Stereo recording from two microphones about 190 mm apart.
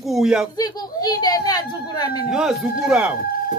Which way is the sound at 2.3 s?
Centre (ahead or behind).